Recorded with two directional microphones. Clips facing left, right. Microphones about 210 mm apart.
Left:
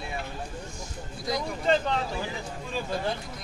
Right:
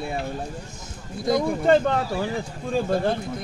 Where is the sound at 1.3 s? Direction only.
50° right (ahead or behind).